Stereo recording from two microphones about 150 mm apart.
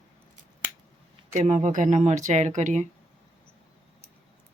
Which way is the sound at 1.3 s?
50° right (ahead or behind).